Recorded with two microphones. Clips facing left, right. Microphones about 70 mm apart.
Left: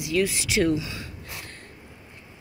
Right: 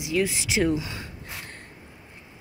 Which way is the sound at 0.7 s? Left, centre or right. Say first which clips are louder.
Even; right.